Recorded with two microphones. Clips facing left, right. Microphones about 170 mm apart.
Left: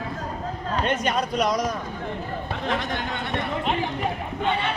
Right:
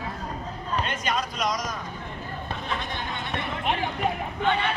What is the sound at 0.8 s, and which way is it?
Speech, 55° left (ahead or behind).